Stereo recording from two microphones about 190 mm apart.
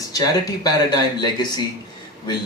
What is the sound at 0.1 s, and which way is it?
Speech, 20° left (ahead or behind).